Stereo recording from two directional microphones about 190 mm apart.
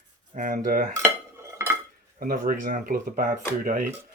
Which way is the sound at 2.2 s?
50° right (ahead or behind).